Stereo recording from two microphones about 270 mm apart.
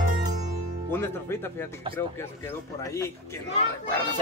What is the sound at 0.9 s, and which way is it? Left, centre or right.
A man's voice, centre.